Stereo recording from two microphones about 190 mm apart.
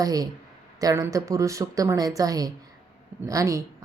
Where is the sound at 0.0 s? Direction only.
20° right (ahead or behind).